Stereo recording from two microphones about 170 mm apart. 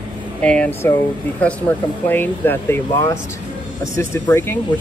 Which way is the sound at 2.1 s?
10° left (ahead or behind).